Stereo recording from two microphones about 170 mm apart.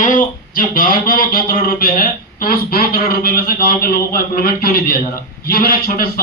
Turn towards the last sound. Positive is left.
turn(degrees=60)  # may be behind; listen again after turning